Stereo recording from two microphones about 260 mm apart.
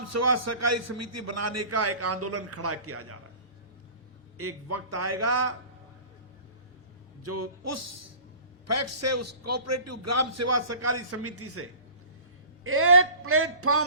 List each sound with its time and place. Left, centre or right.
0.0 s a man's voice: right
4.4 s a man's voice: right
7.3 s a man's voice: right
12.6 s a man's voice: right